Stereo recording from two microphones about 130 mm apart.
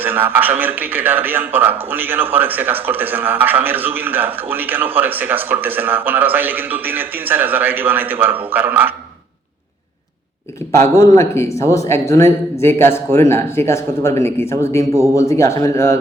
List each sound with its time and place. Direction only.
0.0 s a man's voice: 15° right (ahead or behind)
10.6 s a sound: 20° left (ahead or behind)
10.9 s speech: 20° left (ahead or behind)